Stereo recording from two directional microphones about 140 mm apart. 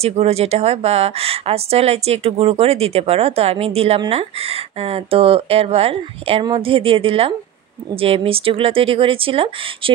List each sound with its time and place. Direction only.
0.0 s a woman's voice: 50° right (ahead or behind)